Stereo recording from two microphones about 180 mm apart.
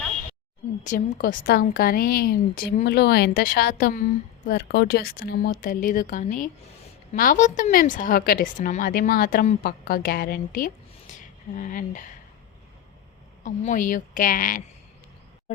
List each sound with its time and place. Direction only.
0.9 s a woman's voice: 50° left (ahead or behind)
13.4 s a woman's voice: 45° left (ahead or behind)